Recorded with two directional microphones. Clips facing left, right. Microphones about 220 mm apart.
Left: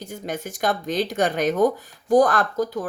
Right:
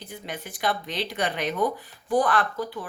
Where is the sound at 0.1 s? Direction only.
45° left (ahead or behind).